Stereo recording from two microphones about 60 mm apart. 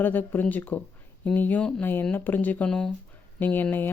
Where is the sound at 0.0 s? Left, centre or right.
Left.